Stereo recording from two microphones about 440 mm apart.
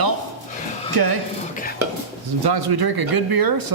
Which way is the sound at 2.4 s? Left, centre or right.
Right.